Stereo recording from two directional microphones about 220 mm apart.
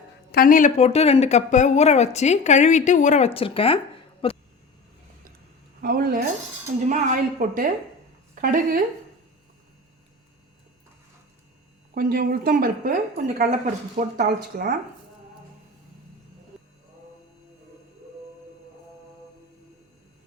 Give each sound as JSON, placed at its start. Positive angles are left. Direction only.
{"t": 0.3, "sound": "speech", "side_deg": 40}
{"t": 5.8, "sound": "a woman's voice", "side_deg": -45}
{"t": 11.9, "sound": "a woman's voice", "side_deg": -45}